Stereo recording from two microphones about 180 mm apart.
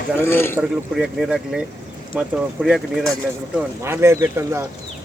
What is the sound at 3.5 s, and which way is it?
Speech, 15° right (ahead or behind).